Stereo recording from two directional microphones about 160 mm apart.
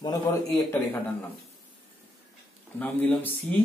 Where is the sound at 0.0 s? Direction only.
25° left (ahead or behind).